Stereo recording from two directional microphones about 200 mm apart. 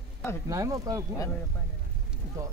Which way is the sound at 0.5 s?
15° right (ahead or behind).